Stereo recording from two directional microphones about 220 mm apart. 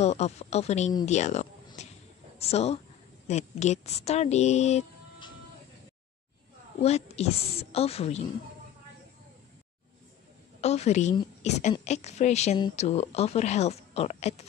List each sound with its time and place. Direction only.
0.0 s speech: 30° left (ahead or behind)
1.8 s a sound: 30° left (ahead or behind)
2.3 s speech: 30° left (ahead or behind)
6.8 s speech: 30° left (ahead or behind)
10.6 s speech: 30° left (ahead or behind)